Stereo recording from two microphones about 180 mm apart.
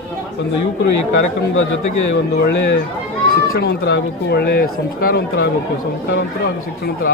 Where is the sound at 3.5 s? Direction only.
65° left (ahead or behind).